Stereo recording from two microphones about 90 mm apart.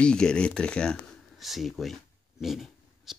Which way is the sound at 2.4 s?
Centre (ahead or behind).